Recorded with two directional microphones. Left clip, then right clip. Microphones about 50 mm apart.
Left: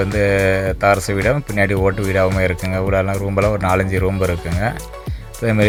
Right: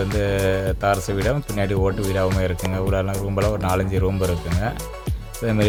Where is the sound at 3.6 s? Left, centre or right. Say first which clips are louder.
Left 5 dB; left.